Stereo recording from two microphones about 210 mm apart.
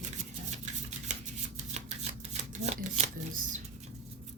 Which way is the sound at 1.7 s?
35° right (ahead or behind).